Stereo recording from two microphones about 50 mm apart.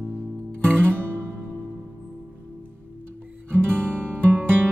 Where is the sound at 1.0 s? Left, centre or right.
Right.